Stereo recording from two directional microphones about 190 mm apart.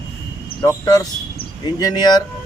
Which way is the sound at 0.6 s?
20° left (ahead or behind).